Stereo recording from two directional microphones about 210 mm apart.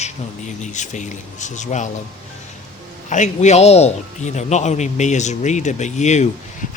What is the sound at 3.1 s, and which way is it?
Speech, 35° left (ahead or behind).